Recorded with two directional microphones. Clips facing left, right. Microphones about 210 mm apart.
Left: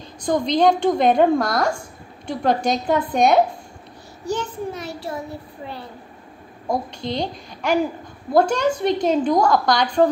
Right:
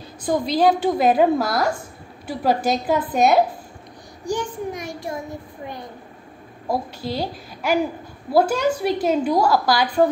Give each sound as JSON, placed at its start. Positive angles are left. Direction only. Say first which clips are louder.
{"t": 0.2, "sound": "a woman's voice", "louder": "left 1 dB", "side_deg": -5}
{"t": 4.3, "sound": "a woman's voice", "louder": "even", "side_deg": -15}
{"t": 6.7, "sound": "a woman's voice", "louder": "left 1 dB", "side_deg": -5}